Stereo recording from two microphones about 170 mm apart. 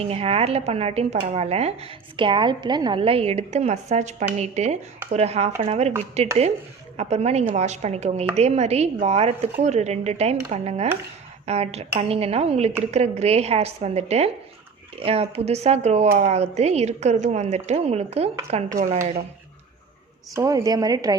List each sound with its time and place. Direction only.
0.0 s speech: 35° right (ahead or behind)
20.3 s a woman's voice: 20° right (ahead or behind)